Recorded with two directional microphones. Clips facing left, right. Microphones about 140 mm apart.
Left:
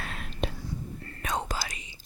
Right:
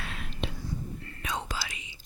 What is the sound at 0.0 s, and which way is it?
Whispering, 45° left (ahead or behind).